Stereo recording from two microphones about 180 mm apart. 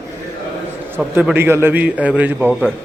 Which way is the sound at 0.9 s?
10° right (ahead or behind).